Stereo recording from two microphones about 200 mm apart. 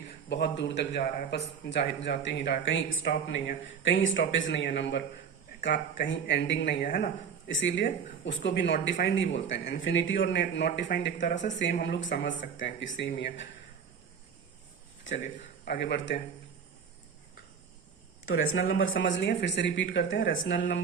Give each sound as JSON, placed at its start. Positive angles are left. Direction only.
{"t": 0.3, "sound": "speech", "side_deg": 55}
{"t": 10.8, "sound": "speech", "side_deg": 45}
{"t": 15.2, "sound": "a man's voice", "side_deg": 50}
{"t": 18.3, "sound": "speech", "side_deg": 80}